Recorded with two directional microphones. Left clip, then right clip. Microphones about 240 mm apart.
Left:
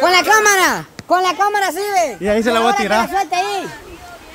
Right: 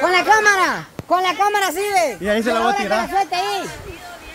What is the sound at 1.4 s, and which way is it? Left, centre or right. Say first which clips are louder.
Speech: left 1 dB; centre.